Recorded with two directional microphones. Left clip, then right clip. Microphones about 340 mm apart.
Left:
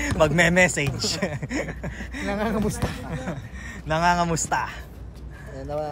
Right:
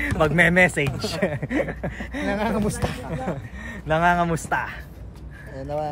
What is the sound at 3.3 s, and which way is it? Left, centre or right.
Speech, centre.